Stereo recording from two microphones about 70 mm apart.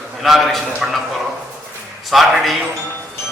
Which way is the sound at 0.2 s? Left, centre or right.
Centre.